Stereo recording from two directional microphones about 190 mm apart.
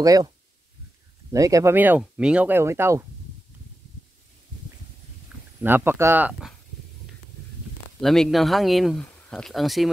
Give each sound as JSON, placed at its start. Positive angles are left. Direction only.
{"t": 0.0, "sound": "speech", "side_deg": -20}
{"t": 1.3, "sound": "speech", "side_deg": -15}
{"t": 5.6, "sound": "speech", "side_deg": -10}
{"t": 8.0, "sound": "speech", "side_deg": 0}